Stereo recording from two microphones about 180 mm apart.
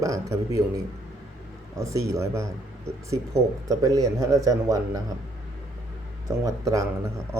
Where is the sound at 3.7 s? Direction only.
20° right (ahead or behind).